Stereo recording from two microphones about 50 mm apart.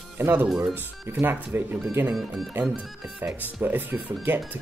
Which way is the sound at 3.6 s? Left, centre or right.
Right.